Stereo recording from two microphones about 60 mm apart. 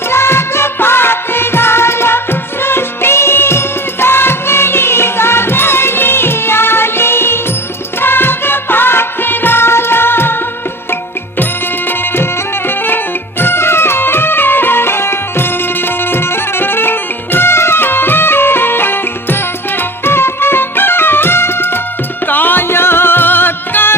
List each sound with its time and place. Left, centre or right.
0.1 s music: left
11.9 s music: left